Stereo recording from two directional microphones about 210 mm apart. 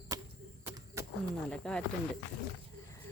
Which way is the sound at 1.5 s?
5° left (ahead or behind).